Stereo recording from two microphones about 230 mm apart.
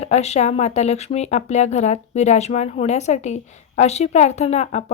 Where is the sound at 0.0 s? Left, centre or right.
Left.